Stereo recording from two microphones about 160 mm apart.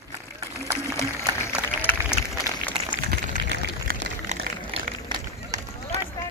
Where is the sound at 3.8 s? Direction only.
65° right (ahead or behind).